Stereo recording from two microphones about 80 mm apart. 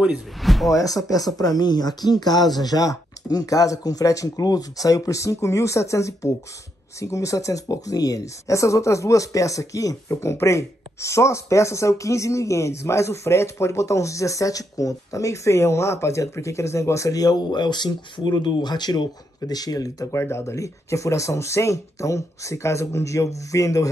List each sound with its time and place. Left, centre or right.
0.4 s speech: centre
0.7 s speech: left
20.1 s speech: left